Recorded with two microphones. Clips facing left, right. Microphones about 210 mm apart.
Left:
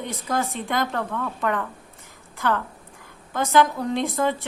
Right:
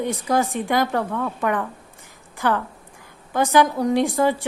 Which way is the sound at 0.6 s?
15° right (ahead or behind).